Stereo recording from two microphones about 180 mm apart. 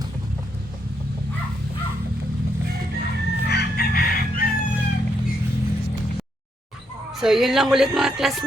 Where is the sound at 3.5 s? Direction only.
65° left (ahead or behind).